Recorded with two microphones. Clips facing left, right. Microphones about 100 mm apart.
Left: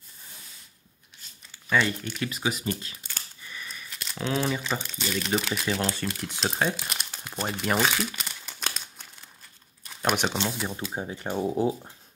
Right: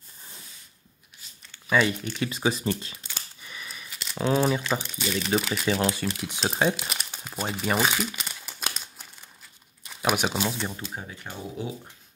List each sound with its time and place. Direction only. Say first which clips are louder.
1.7 s speech: right 2 dB; 15° right (ahead or behind)
2.1 s speech: right 3 dB; 25° right (ahead or behind)
3.2 s a sound: even; 15° right (ahead or behind)
3.6 s a sound: right 1 dB; 5° right (ahead or behind)
4.3 s speech: right 4 dB; 10° right (ahead or behind)
7.2 s crumpling: even; 5° right (ahead or behind)
9.8 s speech: right 1 dB; 5° right (ahead or behind)
10.7 s speech: left 4 dB; 20° left (ahead or behind)